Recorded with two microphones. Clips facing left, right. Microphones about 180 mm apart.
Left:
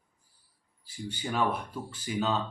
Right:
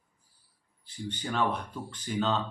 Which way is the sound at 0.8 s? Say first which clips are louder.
Even; 10° left (ahead or behind).